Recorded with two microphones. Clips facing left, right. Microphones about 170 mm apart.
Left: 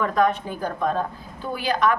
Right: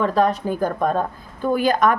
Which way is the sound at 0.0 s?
30° right (ahead or behind).